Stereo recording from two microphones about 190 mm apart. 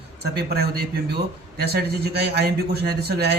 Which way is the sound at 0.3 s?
55° right (ahead or behind).